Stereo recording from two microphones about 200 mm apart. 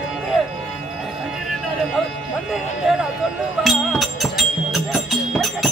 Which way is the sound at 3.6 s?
Centre (ahead or behind).